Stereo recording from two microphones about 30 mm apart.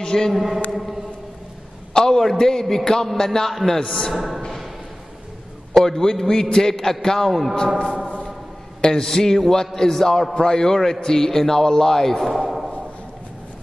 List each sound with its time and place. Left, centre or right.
0.0 s a man's voice: left
0.3 s a sound: centre
2.0 s a man's voice: centre
5.8 s a man's voice: centre
7.7 s speech: centre
8.8 s a man's voice: centre
12.3 s a sound: centre